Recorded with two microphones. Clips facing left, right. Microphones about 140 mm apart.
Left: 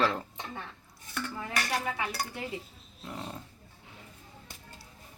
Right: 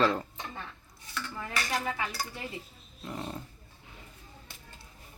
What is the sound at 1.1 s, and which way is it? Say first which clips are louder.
Speech: left 2 dB; 60° left (ahead or behind).